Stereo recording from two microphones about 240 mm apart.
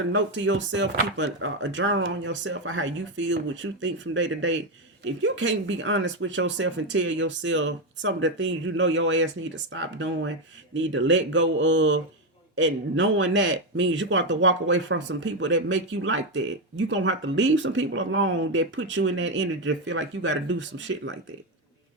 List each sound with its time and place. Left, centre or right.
0.1 s a man's voice: right